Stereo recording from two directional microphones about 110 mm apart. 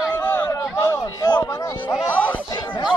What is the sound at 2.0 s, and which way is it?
Music, 15° left (ahead or behind).